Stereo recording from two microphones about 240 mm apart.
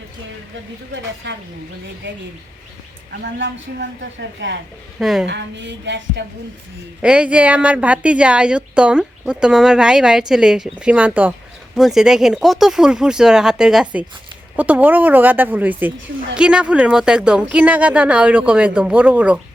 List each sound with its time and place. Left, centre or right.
1.2 s a woman's voice: right
4.9 s a woman's voice: centre
5.2 s a woman's voice: right
7.0 s a woman's voice: centre